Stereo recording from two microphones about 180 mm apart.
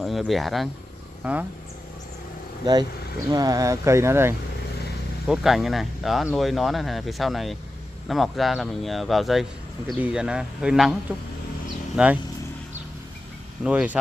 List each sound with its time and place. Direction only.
0.0 s speech: centre (ahead or behind)
2.6 s speech: 20° right (ahead or behind)
5.2 s speech: centre (ahead or behind)
13.7 s speech: 5° right (ahead or behind)